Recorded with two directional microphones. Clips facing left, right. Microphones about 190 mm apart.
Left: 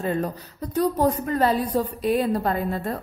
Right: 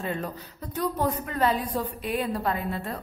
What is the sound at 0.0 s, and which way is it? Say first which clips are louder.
A woman's voice: left 6 dB; 40° left (ahead or behind).